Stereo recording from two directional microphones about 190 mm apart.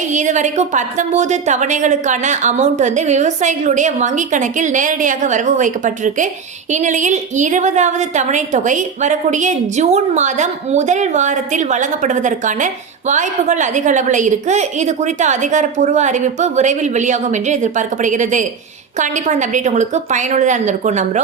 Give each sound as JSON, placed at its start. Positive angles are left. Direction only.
{"t": 0.1, "sound": "a woman's voice", "side_deg": -40}